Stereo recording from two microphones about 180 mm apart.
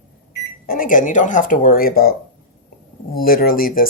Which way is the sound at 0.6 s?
50° left (ahead or behind).